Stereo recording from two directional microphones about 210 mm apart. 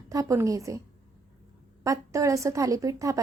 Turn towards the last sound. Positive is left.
turn(degrees=-15)  # may be behind; listen again after turning